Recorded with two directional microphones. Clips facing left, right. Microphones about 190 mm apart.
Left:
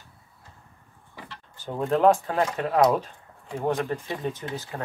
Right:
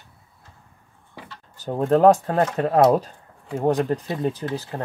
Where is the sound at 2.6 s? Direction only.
30° right (ahead or behind).